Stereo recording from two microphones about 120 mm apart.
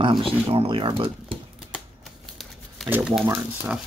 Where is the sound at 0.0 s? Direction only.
45° right (ahead or behind).